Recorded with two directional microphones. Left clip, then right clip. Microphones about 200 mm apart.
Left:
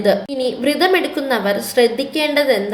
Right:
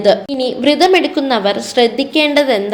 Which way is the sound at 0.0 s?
30° right (ahead or behind).